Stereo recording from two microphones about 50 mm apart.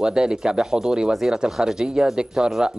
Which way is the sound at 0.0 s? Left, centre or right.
Centre.